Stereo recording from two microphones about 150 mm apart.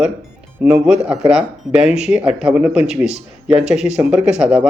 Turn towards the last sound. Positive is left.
turn(degrees=-5)  # may be behind; listen again after turning